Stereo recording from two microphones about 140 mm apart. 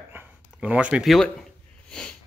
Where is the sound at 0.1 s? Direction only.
10° right (ahead or behind).